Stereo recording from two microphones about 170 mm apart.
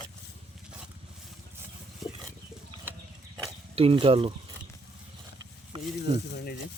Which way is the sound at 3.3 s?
30° right (ahead or behind).